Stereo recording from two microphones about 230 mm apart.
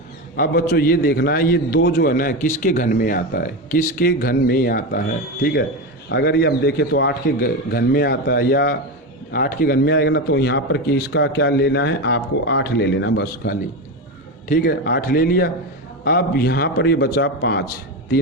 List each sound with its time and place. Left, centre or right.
0.3 s a man's voice: left